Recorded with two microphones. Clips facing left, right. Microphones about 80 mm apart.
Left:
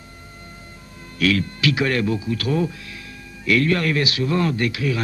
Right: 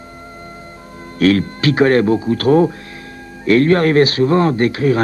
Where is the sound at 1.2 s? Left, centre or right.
Right.